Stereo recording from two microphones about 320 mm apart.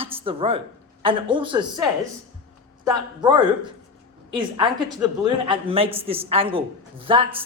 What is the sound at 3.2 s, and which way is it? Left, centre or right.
A woman's voice, centre.